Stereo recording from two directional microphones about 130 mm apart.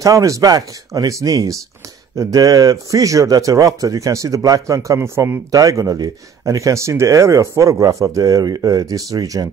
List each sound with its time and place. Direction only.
0.0 s speech: 25° right (ahead or behind)